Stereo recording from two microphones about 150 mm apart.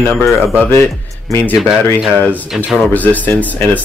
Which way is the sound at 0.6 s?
15° left (ahead or behind).